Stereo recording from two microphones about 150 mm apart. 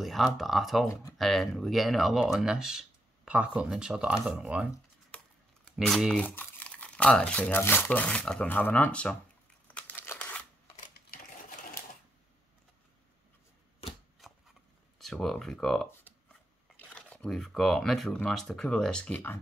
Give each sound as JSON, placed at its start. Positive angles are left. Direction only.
{"t": 0.0, "sound": "speech", "side_deg": 0}
{"t": 5.8, "sound": "speech", "side_deg": 0}
{"t": 9.7, "sound": "crumpling", "side_deg": 10}
{"t": 11.1, "sound": "sewing machine", "side_deg": 70}
{"t": 14.2, "sound": "a sound", "side_deg": 0}
{"t": 15.0, "sound": "speech", "side_deg": 0}
{"t": 16.9, "sound": "speech", "side_deg": 5}